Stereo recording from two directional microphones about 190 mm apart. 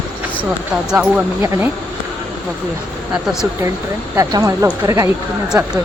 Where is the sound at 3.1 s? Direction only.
Centre (ahead or behind).